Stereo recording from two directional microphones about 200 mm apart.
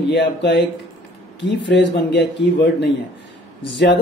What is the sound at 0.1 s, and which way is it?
Speech, 60° left (ahead or behind).